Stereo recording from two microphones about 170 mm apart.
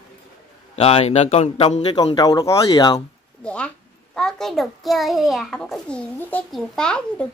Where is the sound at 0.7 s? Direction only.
35° left (ahead or behind).